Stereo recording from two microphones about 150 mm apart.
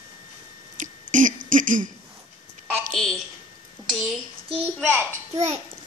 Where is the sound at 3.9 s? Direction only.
Centre (ahead or behind).